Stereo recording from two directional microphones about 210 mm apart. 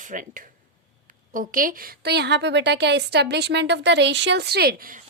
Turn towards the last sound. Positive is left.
turn(degrees=-40)  # may be behind; listen again after turning